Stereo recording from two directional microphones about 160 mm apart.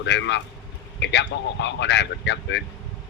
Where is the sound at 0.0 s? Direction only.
90° left.